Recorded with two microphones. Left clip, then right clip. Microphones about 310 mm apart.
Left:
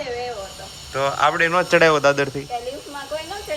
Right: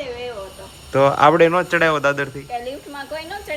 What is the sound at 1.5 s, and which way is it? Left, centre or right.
Speech, centre.